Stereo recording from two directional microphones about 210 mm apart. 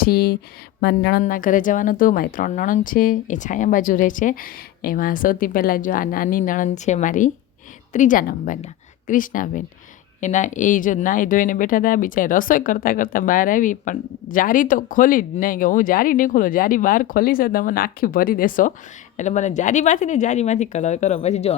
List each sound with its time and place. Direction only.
0.0 s a woman's voice: 45° left (ahead or behind)
1.2 s speech: 40° left (ahead or behind)